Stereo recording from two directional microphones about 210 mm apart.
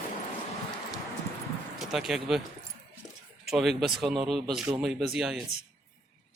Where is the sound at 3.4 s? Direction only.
Centre (ahead or behind).